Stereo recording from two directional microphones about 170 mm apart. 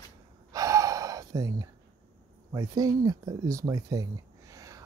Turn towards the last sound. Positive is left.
turn(degrees=-20)  # may be behind; listen again after turning